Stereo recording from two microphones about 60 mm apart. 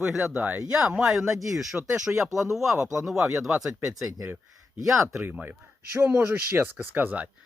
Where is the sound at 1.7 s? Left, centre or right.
Right.